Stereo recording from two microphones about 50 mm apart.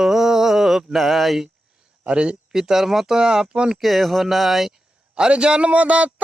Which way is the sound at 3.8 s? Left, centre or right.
Centre.